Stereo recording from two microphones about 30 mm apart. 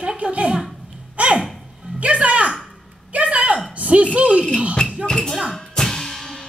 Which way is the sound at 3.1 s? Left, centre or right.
Right.